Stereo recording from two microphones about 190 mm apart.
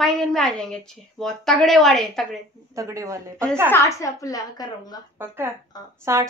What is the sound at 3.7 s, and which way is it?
A woman's voice, 15° left (ahead or behind).